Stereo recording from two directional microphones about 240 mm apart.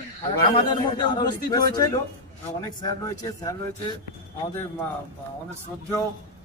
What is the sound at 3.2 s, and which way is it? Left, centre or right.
Speech, centre.